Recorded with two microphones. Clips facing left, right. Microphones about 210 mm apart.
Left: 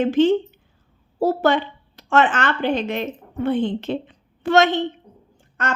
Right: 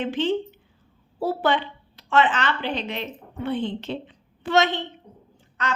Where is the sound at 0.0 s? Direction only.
45° left (ahead or behind).